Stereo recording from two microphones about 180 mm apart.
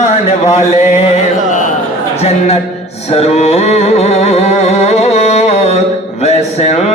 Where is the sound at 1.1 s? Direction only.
45° left (ahead or behind).